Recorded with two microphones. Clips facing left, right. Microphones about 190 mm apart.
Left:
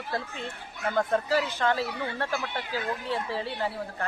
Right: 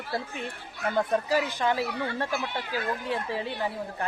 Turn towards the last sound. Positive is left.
turn(degrees=-15)  # may be behind; listen again after turning